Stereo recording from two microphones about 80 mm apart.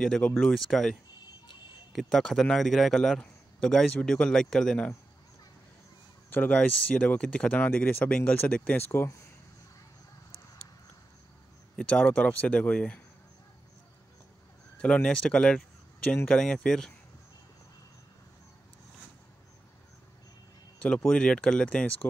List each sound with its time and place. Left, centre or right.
0.0 s a man's voice: centre
6.3 s speech: centre
8.8 s speech: left
11.7 s speech: centre
14.8 s a man's voice: centre
21.1 s speech: centre